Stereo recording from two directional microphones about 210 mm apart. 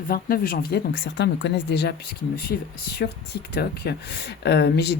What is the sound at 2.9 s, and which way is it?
Speech, 50° left (ahead or behind).